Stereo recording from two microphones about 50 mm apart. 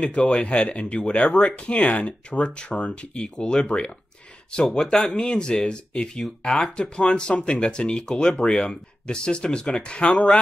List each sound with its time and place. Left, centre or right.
0.0 s speech: centre
4.9 s speech: centre